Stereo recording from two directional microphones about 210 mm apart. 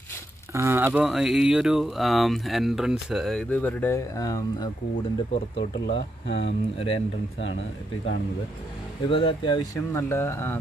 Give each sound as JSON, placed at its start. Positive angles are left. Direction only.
{"t": 0.5, "sound": "speech", "side_deg": -10}
{"t": 5.9, "sound": "speech", "side_deg": 55}
{"t": 6.3, "sound": "speech", "side_deg": 25}
{"t": 9.0, "sound": "speech", "side_deg": 25}